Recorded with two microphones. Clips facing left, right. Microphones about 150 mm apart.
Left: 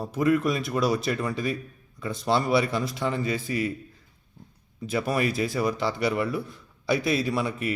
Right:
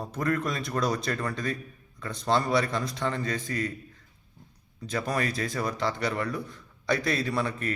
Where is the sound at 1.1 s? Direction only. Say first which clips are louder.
Left 3 dB; 20° left (ahead or behind).